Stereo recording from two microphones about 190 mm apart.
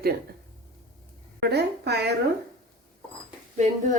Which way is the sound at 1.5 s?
60° right (ahead or behind).